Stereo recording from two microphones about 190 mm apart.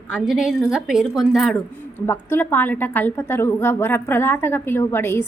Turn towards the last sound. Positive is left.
turn(degrees=15)  # may be behind; listen again after turning